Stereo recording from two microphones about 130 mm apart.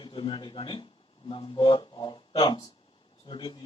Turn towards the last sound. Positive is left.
turn(degrees=40)  # may be behind; listen again after turning